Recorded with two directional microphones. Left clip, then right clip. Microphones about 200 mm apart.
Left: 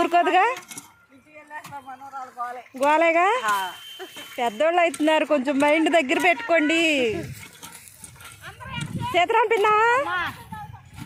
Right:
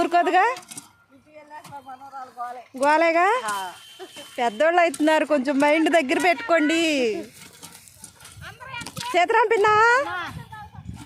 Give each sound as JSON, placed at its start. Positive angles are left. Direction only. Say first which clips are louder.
{"t": 0.0, "sound": "speech", "louder": "even", "side_deg": 0}
{"t": 1.5, "sound": "speech", "louder": "left 2 dB", "side_deg": 15}
{"t": 2.7, "sound": "speech", "louder": "even", "side_deg": -5}
{"t": 4.4, "sound": "speech", "louder": "right 1 dB", "side_deg": -10}
{"t": 8.4, "sound": "children playing", "louder": "even", "side_deg": 55}
{"t": 9.1, "sound": "speech", "louder": "right 1 dB", "side_deg": -10}